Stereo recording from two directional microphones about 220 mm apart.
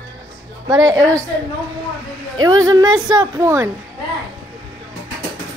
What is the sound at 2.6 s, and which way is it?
Speech, 15° right (ahead or behind).